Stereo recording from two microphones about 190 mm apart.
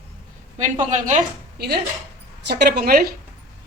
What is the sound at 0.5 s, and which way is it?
Speech, 40° right (ahead or behind).